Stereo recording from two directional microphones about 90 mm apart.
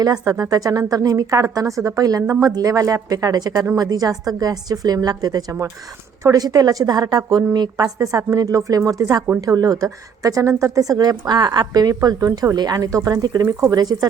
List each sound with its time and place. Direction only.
0.0 s a woman's voice: 40° right (ahead or behind)